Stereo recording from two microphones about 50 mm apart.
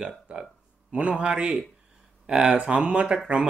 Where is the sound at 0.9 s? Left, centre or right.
Right.